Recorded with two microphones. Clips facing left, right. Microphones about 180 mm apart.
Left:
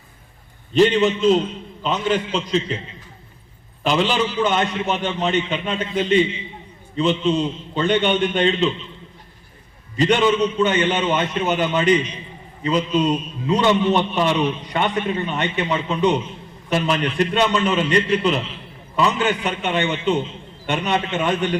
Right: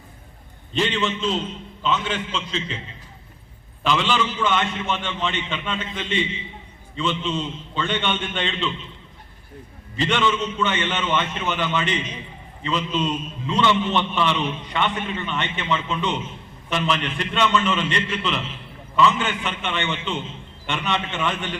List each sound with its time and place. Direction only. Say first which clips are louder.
0.7 s a man's voice: left 8 dB; 40° left (ahead or behind)
3.8 s a man's voice: left 3 dB; 40° left (ahead or behind)
10.0 s a man's voice: left 6 dB; 40° left (ahead or behind)